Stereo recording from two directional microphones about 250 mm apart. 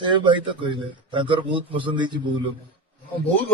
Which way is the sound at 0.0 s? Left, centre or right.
Centre.